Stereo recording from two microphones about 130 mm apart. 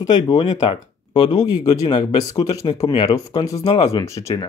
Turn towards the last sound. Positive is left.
turn(degrees=25)  # may be behind; listen again after turning